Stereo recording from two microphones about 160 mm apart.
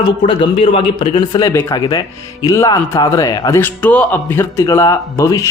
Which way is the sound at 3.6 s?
10° left (ahead or behind).